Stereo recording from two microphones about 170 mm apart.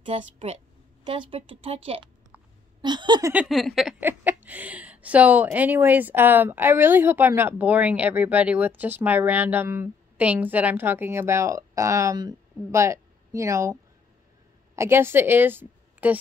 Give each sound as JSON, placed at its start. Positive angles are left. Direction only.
{"t": 0.0, "sound": "speech", "side_deg": -40}
{"t": 2.8, "sound": "a sound", "side_deg": -25}
{"t": 3.3, "sound": "speech", "side_deg": 0}
{"t": 4.0, "sound": "speech", "side_deg": -10}
{"t": 14.8, "sound": "a woman's voice", "side_deg": -15}